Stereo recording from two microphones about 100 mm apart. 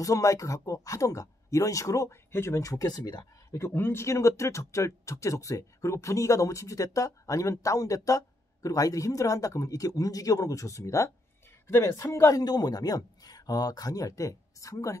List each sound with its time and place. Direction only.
0.0 s speech: 35° left (ahead or behind)
3.5 s speech: 25° left (ahead or behind)